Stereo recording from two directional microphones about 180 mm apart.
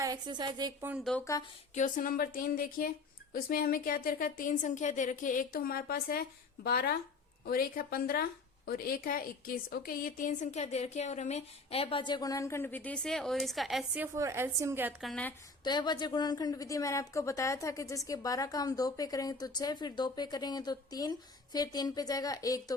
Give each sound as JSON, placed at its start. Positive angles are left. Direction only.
{"t": 0.0, "sound": "speech", "side_deg": -20}
{"t": 0.8, "sound": "a woman's voice", "side_deg": -10}
{"t": 1.2, "sound": "a woman's voice", "side_deg": 20}
{"t": 1.7, "sound": "a woman's voice", "side_deg": 45}
{"t": 14.2, "sound": "a woman's voice", "side_deg": -15}
{"t": 15.0, "sound": "a woman's voice", "side_deg": 5}
{"t": 15.6, "sound": "a woman's voice", "side_deg": 25}